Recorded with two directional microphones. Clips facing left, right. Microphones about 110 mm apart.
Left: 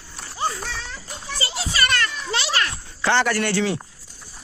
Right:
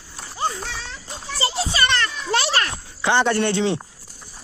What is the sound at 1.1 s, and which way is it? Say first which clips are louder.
Children playing: right 5 dB; 25° right (ahead or behind).